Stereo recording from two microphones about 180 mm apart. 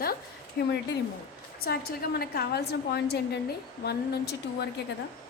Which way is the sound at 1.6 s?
55° left (ahead or behind).